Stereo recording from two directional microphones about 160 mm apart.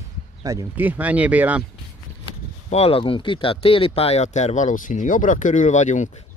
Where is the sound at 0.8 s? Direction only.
10° right (ahead or behind).